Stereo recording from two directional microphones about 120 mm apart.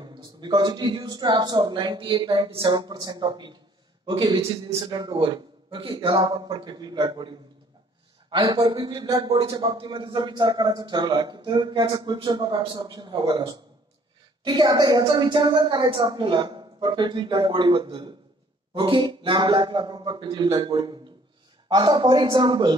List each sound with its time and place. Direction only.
0.0 s a man's voice: 40° right (ahead or behind)